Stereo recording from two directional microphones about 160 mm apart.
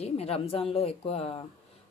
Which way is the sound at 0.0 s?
40° left (ahead or behind).